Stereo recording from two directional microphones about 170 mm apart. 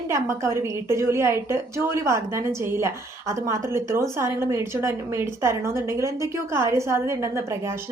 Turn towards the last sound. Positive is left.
turn(degrees=-15)  # may be behind; listen again after turning